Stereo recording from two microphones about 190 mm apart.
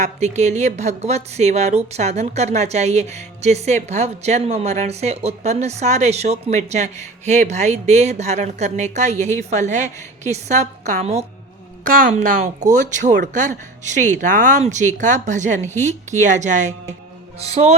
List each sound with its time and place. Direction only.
0.0 s a woman's voice: 35° right (ahead or behind)